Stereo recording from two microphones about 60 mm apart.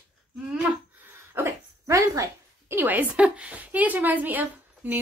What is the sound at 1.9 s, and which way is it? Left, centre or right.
Speech, right.